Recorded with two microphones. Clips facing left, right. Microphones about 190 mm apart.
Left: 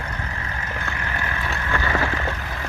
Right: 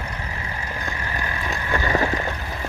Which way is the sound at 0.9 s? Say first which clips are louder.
Even; 15° right (ahead or behind).